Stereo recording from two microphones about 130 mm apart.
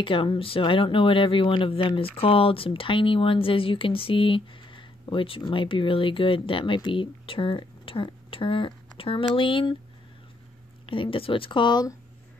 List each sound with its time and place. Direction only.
0.0 s speech: 40° left (ahead or behind)
10.9 s speech: 40° left (ahead or behind)